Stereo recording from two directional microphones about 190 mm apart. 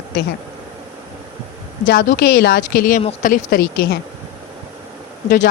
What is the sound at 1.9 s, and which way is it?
Speech, 50° left (ahead or behind).